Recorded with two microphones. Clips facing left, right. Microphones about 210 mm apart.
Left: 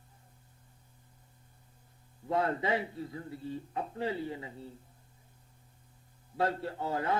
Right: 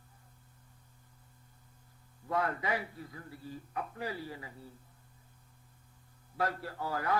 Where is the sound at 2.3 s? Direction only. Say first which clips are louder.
Left 3 dB; 25° left (ahead or behind).